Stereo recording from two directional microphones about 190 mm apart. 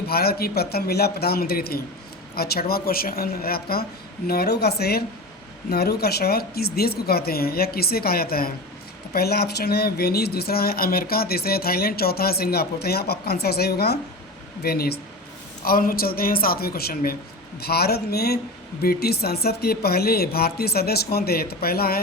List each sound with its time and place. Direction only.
0.1 s a woman's voice: 55° left (ahead or behind)